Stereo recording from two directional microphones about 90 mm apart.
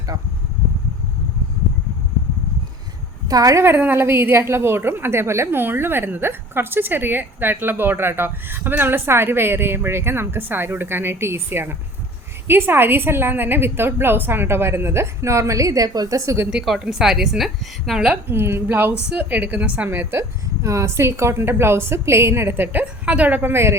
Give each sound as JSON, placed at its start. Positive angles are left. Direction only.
{"t": 3.2, "sound": "a woman's voice", "side_deg": -40}
{"t": 3.6, "sound": "a woman's voice", "side_deg": -25}
{"t": 16.5, "sound": "a woman's voice", "side_deg": -5}
{"t": 18.1, "sound": "a woman's voice", "side_deg": -25}